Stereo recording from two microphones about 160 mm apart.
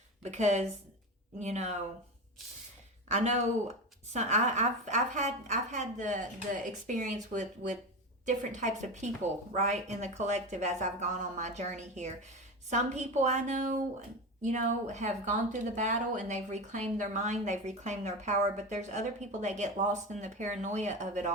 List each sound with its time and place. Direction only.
0.2 s a woman's voice: 45° right (ahead or behind)
3.1 s a woman's voice: 45° right (ahead or behind)